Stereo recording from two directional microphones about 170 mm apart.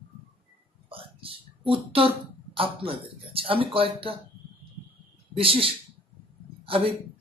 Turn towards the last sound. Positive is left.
turn(degrees=-35)  # may be behind; listen again after turning